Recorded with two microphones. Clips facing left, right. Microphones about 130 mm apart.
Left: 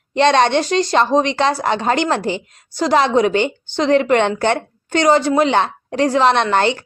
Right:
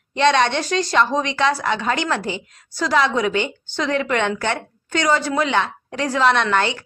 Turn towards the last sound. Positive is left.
turn(degrees=30)  # may be behind; listen again after turning